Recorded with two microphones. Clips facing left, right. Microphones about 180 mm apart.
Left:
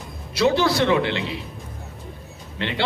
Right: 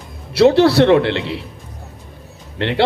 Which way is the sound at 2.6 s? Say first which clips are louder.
Right 7 dB; 65° right (ahead or behind).